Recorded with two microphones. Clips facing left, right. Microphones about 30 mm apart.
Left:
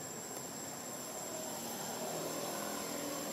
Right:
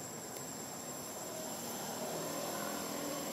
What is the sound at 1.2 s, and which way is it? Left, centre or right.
Vehicle, centre.